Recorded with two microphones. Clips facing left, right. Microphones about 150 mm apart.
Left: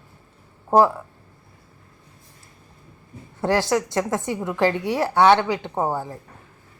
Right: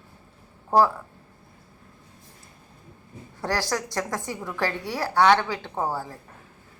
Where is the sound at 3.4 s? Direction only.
20° left (ahead or behind).